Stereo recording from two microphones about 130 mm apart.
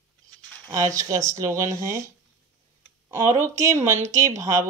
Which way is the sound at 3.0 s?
25° right (ahead or behind).